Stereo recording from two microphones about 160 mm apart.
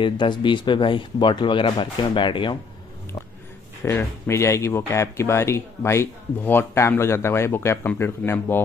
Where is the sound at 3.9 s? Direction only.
15° left (ahead or behind).